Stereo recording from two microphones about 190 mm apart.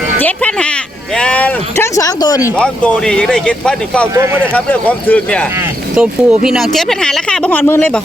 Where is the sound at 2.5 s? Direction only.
5° left (ahead or behind).